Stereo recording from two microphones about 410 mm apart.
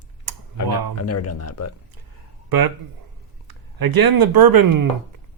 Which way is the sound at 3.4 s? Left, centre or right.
Right.